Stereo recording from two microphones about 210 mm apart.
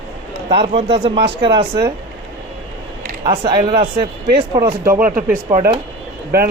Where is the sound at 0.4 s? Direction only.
30° right (ahead or behind).